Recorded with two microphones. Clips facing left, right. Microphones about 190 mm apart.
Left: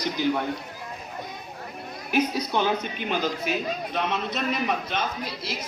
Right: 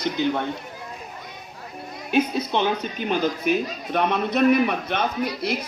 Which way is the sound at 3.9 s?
55° right (ahead or behind).